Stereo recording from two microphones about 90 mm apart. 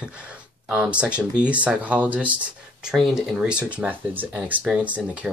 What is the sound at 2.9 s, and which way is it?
Speech, centre (ahead or behind).